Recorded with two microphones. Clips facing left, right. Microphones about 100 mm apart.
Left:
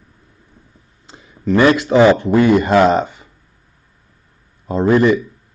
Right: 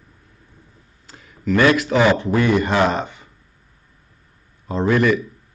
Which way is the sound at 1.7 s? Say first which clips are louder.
Left 7 dB; 25° left (ahead or behind).